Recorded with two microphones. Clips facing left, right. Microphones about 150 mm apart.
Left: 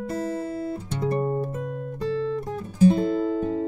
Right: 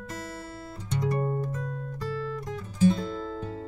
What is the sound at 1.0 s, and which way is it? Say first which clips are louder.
Music: left 3 dB; 30° left (ahead or behind).